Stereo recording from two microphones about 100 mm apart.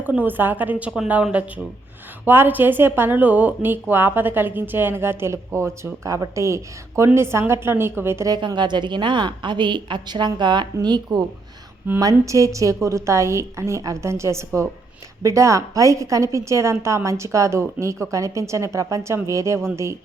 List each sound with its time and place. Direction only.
0.0 s a woman's voice: 15° right (ahead or behind)
8.3 s a woman's voice: 50° right (ahead or behind); by 20.0 s 30° right (ahead or behind)